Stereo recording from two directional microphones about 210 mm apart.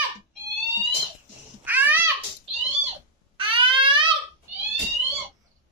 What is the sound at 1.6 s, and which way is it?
Babbling, 10° right (ahead or behind).